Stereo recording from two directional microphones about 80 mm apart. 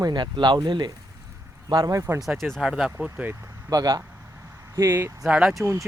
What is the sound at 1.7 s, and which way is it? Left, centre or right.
Speech, right.